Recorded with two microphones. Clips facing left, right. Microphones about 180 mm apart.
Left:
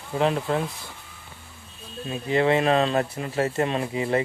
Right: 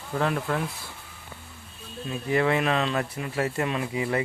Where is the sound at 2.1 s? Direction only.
25° left (ahead or behind).